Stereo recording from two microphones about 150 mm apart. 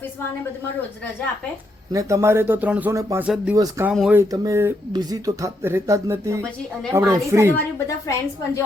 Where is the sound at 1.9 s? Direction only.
25° right (ahead or behind).